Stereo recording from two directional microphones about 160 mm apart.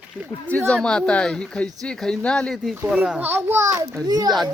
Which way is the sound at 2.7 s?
10° right (ahead or behind).